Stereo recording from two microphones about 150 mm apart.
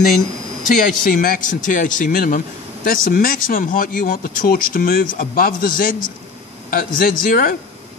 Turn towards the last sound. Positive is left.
turn(degrees=70)  # may be behind; listen again after turning